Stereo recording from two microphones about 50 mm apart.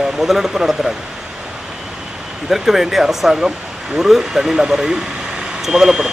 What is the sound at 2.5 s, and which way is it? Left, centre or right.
Speech, centre.